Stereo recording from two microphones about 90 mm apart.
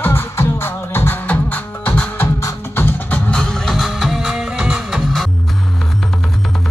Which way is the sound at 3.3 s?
10° left (ahead or behind).